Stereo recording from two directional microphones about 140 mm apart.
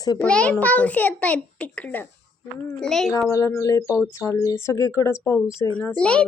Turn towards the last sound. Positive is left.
turn(degrees=10)  # may be behind; listen again after turning